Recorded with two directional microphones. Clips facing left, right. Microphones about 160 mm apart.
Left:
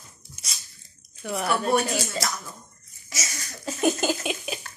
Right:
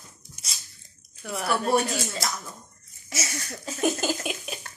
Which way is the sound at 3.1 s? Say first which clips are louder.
Right 4 dB; 60° right (ahead or behind).